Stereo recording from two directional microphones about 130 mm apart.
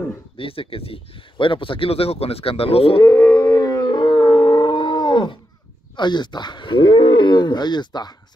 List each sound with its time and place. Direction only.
0.4 s speech: 45° left (ahead or behind)
3.0 s howl: 25° left (ahead or behind); by 5.4 s 40° left (ahead or behind)
5.9 s speech: 35° left (ahead or behind)